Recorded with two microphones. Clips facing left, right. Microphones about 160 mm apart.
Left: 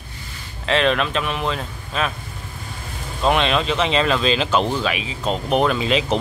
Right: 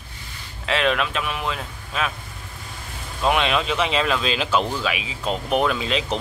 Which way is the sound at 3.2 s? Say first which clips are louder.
Left 2 dB; 5° right (ahead or behind).